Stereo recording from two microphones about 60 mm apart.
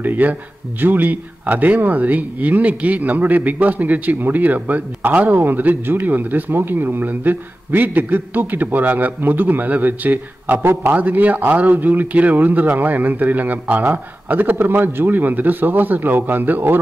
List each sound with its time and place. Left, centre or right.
0.0 s speech: right
11.0 s speech: right